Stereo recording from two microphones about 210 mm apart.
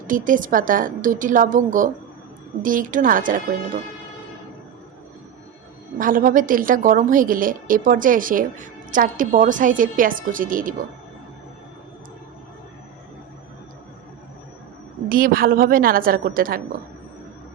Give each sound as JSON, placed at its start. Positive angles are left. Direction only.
{"t": 0.1, "sound": "a woman's voice", "side_deg": -40}
{"t": 6.0, "sound": "a woman's voice", "side_deg": -40}
{"t": 15.1, "sound": "a woman's voice", "side_deg": -45}